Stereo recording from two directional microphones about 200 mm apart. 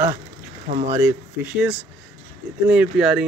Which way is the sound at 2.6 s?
5° right (ahead or behind).